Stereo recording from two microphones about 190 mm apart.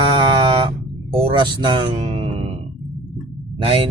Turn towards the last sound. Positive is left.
turn(degrees=-30)  # may be behind; listen again after turning